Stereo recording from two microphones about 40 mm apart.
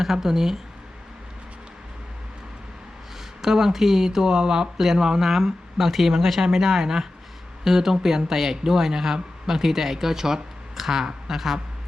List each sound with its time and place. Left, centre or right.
0.0 s speech: centre
3.4 s speech: centre